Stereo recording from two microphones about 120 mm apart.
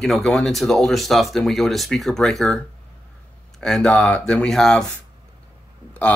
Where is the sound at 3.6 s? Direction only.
5° left (ahead or behind).